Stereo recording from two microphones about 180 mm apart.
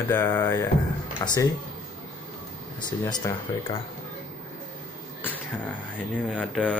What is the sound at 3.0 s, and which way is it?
Speech, 20° left (ahead or behind).